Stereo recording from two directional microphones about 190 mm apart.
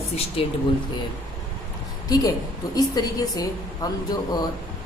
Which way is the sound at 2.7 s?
20° left (ahead or behind).